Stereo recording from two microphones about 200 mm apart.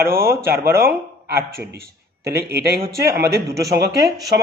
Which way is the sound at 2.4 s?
50° right (ahead or behind).